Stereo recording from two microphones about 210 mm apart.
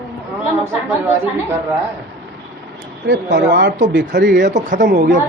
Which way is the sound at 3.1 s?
50° right (ahead or behind).